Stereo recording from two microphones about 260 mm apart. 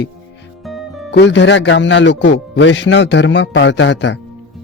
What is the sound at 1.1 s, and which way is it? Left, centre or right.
A man's voice, left.